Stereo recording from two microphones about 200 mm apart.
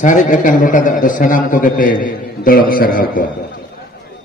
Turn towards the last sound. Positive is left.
turn(degrees=45)  # may be behind; listen again after turning